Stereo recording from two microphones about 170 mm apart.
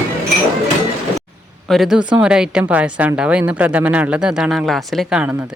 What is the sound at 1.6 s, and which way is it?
A woman's voice, centre (ahead or behind).